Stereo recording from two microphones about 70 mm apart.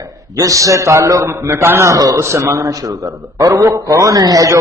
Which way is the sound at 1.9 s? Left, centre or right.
Right.